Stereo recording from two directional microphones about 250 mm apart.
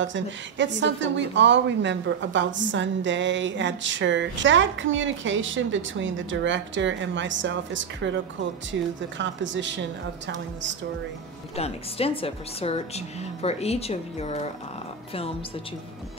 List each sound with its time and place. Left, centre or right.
0.0 s a woman's voice: right
11.5 s a woman's voice: left